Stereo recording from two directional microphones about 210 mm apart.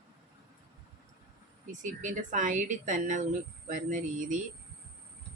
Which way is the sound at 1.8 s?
35° right (ahead or behind).